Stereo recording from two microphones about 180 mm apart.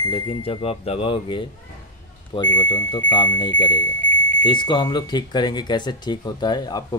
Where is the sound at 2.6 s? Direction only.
25° left (ahead or behind).